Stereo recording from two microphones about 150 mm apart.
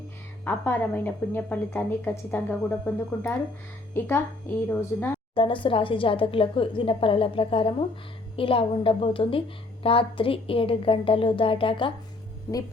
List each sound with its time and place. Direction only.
0.4 s a woman's voice: 15° left (ahead or behind)
5.3 s a woman's voice: 35° left (ahead or behind)